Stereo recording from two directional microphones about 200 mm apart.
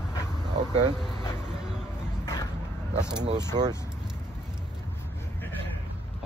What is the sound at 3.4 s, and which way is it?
Speech, 20° right (ahead or behind).